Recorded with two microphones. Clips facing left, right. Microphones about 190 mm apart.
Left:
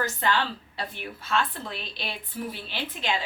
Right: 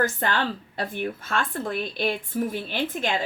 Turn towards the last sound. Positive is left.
turn(degrees=-50)  # may be behind; listen again after turning